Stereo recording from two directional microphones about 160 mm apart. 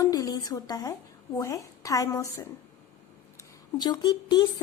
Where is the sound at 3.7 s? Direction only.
25° left (ahead or behind).